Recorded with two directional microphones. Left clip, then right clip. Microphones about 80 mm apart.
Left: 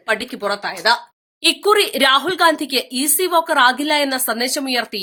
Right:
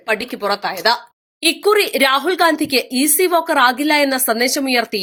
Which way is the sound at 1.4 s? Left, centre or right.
Right.